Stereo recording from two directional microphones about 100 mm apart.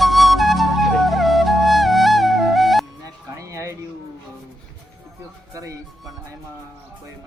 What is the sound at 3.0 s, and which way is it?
Music, 30° right (ahead or behind).